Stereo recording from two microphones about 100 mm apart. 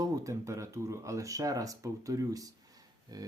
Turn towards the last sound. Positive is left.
turn(degrees=-40)  # may be behind; listen again after turning